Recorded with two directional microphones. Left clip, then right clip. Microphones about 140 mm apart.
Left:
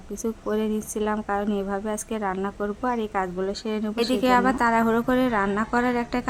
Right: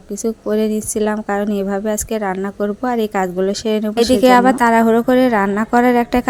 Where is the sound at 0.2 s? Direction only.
20° right (ahead or behind).